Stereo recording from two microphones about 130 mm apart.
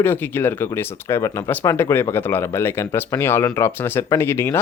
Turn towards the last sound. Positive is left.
turn(degrees=20)  # may be behind; listen again after turning